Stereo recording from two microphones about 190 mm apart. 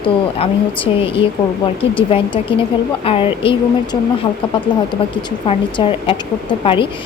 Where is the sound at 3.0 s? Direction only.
30° left (ahead or behind).